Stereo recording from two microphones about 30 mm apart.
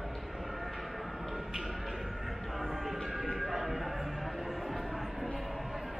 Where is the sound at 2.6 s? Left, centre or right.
Centre.